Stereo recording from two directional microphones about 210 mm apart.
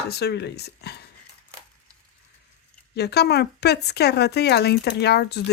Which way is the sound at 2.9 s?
50° left (ahead or behind).